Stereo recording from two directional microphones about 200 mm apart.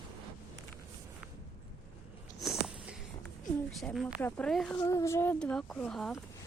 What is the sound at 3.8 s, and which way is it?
Speech, centre (ahead or behind).